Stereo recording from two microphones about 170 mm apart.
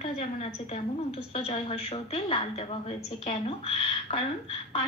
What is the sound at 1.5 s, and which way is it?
A woman's voice, 35° left (ahead or behind).